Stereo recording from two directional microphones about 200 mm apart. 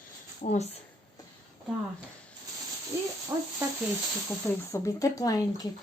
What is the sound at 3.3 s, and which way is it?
Sizzle, 15° right (ahead or behind).